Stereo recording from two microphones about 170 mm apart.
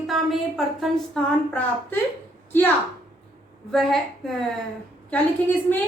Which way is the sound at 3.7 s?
Centre (ahead or behind).